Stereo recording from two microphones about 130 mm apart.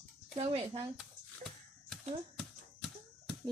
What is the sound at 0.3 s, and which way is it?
Speech, 50° right (ahead or behind).